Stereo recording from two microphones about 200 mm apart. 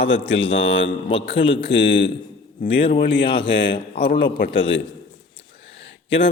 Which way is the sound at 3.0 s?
65° left (ahead or behind).